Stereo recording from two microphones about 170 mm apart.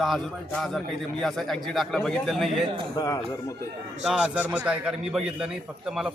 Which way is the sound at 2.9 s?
20° left (ahead or behind).